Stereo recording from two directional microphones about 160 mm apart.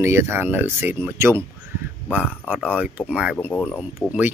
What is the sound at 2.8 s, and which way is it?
Speech, 5° right (ahead or behind).